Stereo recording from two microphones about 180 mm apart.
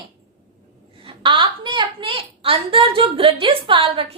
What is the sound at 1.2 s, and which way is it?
A woman's voice, 25° right (ahead or behind).